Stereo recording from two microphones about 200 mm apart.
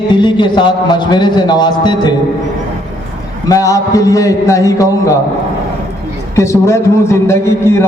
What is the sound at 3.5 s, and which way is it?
A man's voice, 15° left (ahead or behind).